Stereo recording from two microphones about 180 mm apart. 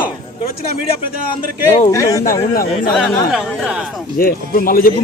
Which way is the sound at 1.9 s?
20° left (ahead or behind).